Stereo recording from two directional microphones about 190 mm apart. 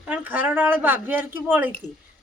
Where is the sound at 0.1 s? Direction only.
10° right (ahead or behind).